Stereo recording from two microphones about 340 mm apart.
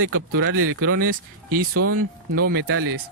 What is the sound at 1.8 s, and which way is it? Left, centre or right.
Speech, right.